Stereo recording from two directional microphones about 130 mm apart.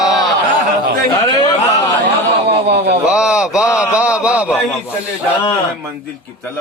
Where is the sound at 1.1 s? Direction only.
30° left (ahead or behind).